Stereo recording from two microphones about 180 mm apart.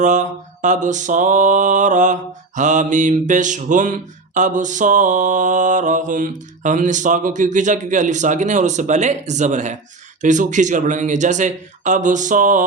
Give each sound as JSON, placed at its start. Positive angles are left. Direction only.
{"t": 0.0, "sound": "mantra", "side_deg": -45}